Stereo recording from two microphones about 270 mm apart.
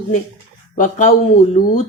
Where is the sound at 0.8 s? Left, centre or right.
Left.